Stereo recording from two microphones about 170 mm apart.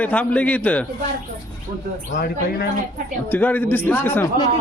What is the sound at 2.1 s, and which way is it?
Speech, 60° left (ahead or behind).